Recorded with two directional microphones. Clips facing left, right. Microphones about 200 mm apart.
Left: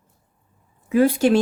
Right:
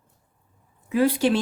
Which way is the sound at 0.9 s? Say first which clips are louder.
Left 4 dB; 45° left (ahead or behind).